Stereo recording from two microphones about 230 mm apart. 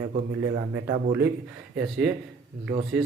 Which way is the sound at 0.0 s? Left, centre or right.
Right.